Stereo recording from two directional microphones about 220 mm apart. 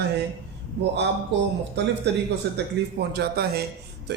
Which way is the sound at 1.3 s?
55° right (ahead or behind).